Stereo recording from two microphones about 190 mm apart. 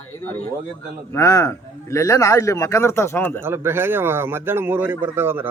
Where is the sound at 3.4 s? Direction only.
10° right (ahead or behind).